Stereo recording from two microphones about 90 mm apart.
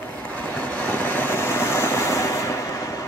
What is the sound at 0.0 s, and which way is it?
Vehicle, 15° left (ahead or behind).